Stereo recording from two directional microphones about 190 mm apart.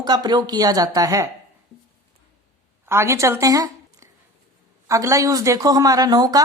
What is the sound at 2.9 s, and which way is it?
Speech, 15° right (ahead or behind).